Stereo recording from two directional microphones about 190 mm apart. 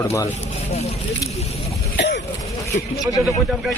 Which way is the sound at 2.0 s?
70° left (ahead or behind).